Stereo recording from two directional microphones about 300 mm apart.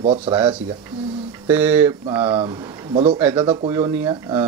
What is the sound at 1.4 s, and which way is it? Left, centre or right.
Speech, centre.